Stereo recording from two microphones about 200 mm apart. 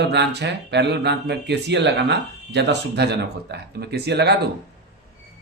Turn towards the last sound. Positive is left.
turn(degrees=-55)  # may be behind; listen again after turning